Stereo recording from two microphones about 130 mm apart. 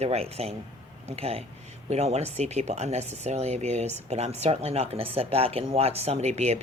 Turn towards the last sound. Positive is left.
turn(degrees=-60)  # may be behind; listen again after turning